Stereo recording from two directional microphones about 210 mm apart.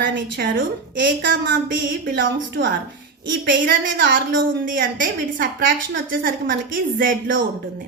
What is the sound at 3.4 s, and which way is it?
A woman's voice, 50° right (ahead or behind).